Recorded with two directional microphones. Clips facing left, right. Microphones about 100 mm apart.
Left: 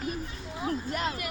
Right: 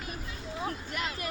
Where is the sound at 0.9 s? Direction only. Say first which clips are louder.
Left 4 dB; 40° left (ahead or behind).